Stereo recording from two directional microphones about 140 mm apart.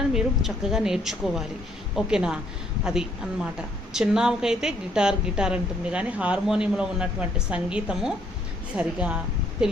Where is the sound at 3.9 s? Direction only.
5° right (ahead or behind).